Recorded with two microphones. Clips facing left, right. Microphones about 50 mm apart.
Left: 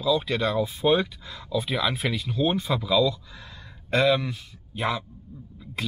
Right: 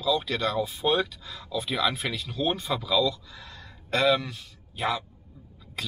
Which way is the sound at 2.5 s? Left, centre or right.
Centre.